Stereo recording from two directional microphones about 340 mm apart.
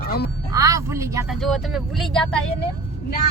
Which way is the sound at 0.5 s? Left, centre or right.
Centre.